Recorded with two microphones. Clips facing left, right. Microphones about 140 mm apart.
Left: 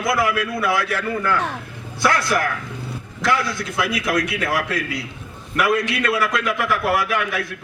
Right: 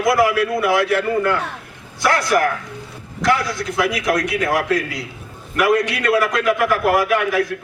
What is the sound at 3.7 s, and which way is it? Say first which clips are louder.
A man's voice: right 3 dB; 25° right (ahead or behind).